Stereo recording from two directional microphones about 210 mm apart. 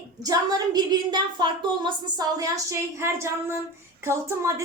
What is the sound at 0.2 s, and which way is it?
A woman's voice, 20° right (ahead or behind).